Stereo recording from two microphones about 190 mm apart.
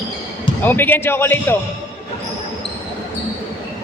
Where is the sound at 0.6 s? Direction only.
10° left (ahead or behind).